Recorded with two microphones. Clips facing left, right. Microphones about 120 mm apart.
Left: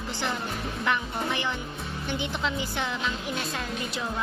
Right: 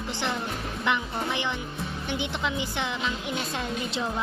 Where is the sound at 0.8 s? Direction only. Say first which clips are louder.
Right 1 dB; 20° right (ahead or behind).